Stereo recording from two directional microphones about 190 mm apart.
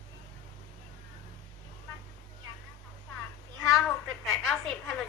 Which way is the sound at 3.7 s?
Centre (ahead or behind).